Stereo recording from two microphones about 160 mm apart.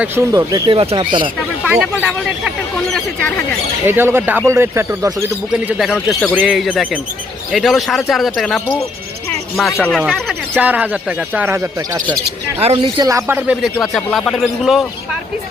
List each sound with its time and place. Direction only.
0.0 s speech: 15° right (ahead or behind)
0.8 s speech: 35° right (ahead or behind)
1.8 s speech: centre (ahead or behind)
3.8 s speech: 15° right (ahead or behind)
5.5 s speech: 5° right (ahead or behind)
9.7 s speech: 10° left (ahead or behind); by 12.0 s 15° right (ahead or behind)
12.5 s speech: 35° right (ahead or behind)
13.0 s speech: 20° right (ahead or behind)
13.6 s speech: centre (ahead or behind)